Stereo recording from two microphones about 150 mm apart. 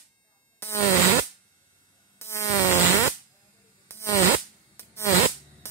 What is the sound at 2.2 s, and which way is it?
Buzz, 20° left (ahead or behind).